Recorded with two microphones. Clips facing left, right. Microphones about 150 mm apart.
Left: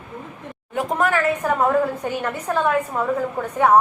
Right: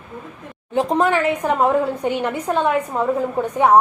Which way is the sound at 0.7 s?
25° right (ahead or behind).